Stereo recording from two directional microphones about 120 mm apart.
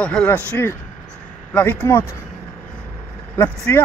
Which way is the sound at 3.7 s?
20° left (ahead or behind).